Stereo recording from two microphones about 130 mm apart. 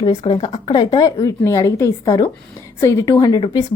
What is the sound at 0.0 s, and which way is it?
A woman's voice, 40° left (ahead or behind).